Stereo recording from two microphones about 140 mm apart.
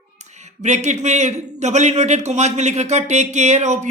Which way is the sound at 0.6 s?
55° right (ahead or behind).